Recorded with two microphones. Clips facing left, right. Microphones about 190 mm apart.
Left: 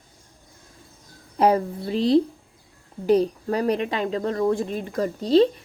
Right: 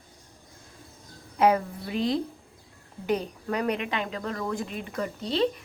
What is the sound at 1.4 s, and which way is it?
Speech, 35° left (ahead or behind).